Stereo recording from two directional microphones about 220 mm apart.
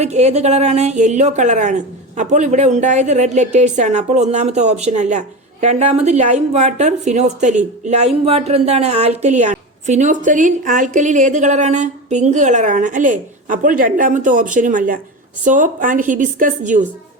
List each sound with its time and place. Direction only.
0.0 s a woman's voice: 30° right (ahead or behind)